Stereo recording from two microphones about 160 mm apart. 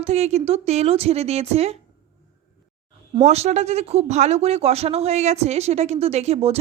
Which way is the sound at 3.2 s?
40° right (ahead or behind).